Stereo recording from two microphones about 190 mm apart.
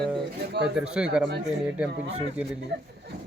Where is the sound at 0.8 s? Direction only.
5° right (ahead or behind).